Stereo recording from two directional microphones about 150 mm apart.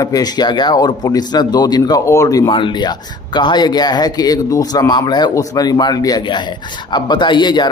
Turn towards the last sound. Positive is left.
turn(degrees=30)  # may be behind; listen again after turning